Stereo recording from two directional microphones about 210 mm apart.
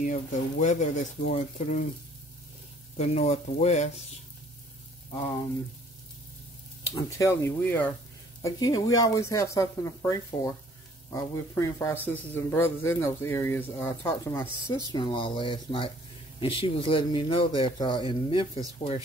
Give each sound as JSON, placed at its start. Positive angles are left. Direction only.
{"t": 0.0, "sound": "speech", "side_deg": 35}
{"t": 3.0, "sound": "speech", "side_deg": 35}
{"t": 7.1, "sound": "a man's voice", "side_deg": 15}